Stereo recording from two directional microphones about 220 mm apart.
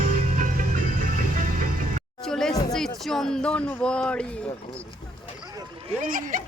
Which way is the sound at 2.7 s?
Centre (ahead or behind).